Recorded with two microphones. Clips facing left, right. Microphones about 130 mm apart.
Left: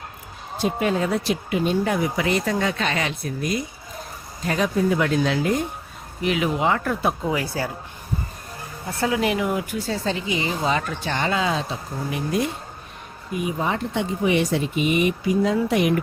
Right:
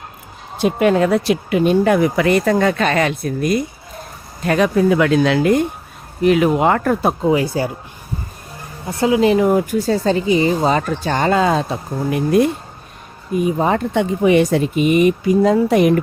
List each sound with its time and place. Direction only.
0.6 s speech: 70° right (ahead or behind)
4.4 s speech: 70° right (ahead or behind)
6.2 s speech: 50° right (ahead or behind)
7.3 s speech: 25° right (ahead or behind)
8.9 s speech: 20° right (ahead or behind)
9.3 s a woman's voice: 40° right (ahead or behind); by 12.5 s 55° right (ahead or behind)
13.3 s speech: 40° right (ahead or behind)